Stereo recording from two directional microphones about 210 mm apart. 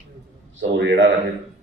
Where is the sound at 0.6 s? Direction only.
60° right (ahead or behind).